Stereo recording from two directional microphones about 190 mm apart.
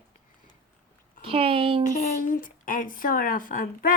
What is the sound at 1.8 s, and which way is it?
Speech, 45° left (ahead or behind).